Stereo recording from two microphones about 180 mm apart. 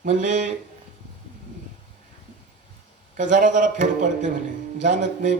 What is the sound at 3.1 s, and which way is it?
Speech, 45° right (ahead or behind).